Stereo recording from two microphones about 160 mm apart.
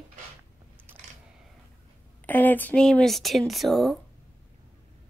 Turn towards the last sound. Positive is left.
turn(degrees=0)  # may be behind; listen again after turning